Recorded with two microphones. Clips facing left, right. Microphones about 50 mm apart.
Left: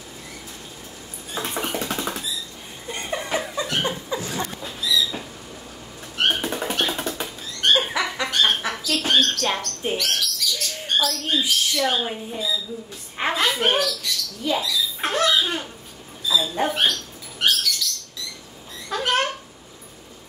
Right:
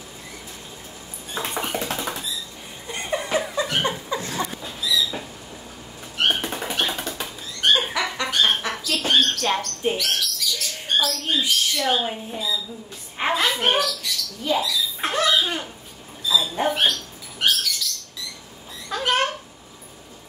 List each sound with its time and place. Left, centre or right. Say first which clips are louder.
1.5 s rodents: even; centre
3.8 s chuckle: right 1 dB; right
4.5 s rodents: left 1 dB; centre
7.6 s a sound: even; centre
13.2 s rodents: even; centre
16.3 s bird: even; centre
18.9 s a sound: even; centre